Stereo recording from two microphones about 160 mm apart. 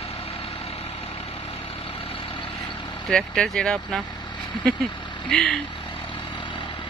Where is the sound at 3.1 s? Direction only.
5° left (ahead or behind).